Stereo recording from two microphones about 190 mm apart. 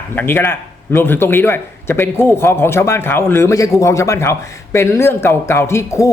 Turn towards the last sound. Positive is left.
turn(degrees=15)  # may be behind; listen again after turning